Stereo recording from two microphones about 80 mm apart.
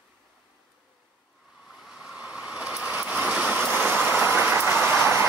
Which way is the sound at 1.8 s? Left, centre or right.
Centre.